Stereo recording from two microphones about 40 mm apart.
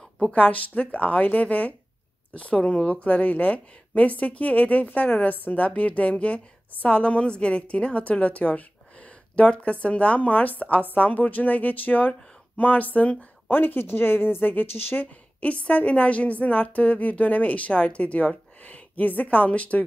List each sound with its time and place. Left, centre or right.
0.3 s a woman's voice: left
5.3 s a woman's voice: left
13.5 s speech: left
15.0 s a woman's voice: left